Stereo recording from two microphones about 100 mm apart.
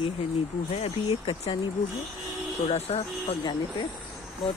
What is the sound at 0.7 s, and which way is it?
Speech, 90° left.